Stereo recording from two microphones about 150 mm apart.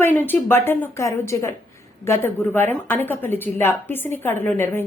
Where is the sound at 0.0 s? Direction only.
15° left (ahead or behind).